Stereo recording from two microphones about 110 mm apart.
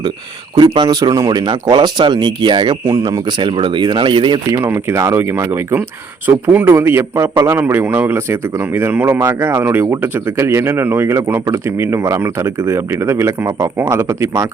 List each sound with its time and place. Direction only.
0.5 s speech: 40° right (ahead or behind)
4.5 s speech: 20° right (ahead or behind)
7.6 s speech: 15° right (ahead or behind)